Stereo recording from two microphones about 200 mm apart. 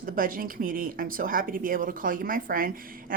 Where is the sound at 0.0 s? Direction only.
45° right (ahead or behind).